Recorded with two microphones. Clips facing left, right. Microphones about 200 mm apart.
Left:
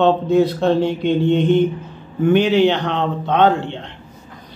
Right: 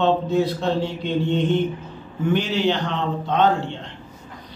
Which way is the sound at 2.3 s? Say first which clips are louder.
Left 7 dB; 60° left (ahead or behind).